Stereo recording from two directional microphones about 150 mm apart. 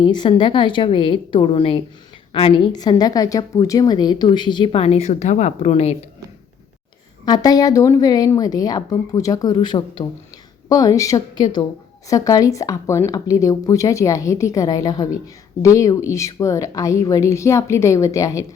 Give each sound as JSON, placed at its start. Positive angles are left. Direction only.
{"t": 0.0, "sound": "a woman's voice", "side_deg": 30}
{"t": 7.3, "sound": "speech", "side_deg": 25}